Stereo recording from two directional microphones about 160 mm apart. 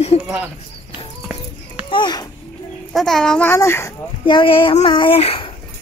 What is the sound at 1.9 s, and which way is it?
Speech, 30° left (ahead or behind).